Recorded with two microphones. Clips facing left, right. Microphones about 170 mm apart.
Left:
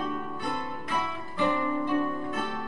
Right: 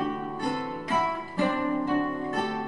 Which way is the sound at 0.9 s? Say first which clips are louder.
Right 5 dB; 45° right (ahead or behind).